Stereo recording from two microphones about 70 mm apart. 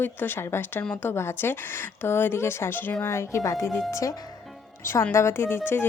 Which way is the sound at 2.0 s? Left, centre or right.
Left.